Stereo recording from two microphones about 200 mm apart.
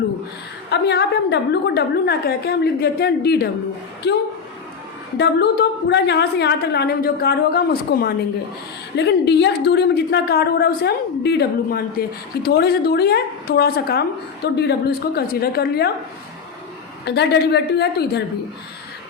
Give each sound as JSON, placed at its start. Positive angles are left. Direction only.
{"t": 0.7, "sound": "a woman's voice", "side_deg": 55}
{"t": 5.1, "sound": "a woman's voice", "side_deg": 55}
{"t": 17.1, "sound": "a woman's voice", "side_deg": 55}